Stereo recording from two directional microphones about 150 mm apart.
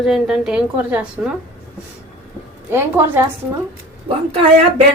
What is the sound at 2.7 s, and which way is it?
Speech, 15° right (ahead or behind).